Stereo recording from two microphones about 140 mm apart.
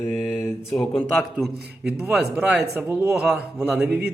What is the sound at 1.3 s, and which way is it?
Speech, 10° right (ahead or behind).